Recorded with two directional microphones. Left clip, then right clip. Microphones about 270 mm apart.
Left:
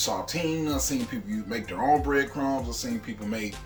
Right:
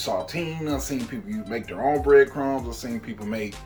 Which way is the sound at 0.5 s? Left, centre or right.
Centre.